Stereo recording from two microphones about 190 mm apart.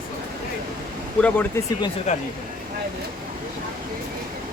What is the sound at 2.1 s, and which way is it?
Speech, 35° left (ahead or behind).